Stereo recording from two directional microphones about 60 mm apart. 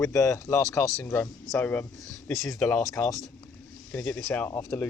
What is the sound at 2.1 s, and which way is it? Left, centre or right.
Speech, left.